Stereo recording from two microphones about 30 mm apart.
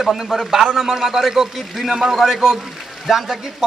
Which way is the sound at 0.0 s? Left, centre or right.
Centre.